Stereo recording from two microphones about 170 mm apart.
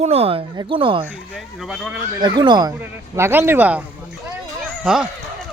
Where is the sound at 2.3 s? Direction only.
25° right (ahead or behind).